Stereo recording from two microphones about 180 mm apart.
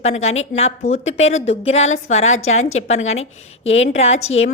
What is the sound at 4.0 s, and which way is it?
Speech, 35° left (ahead or behind).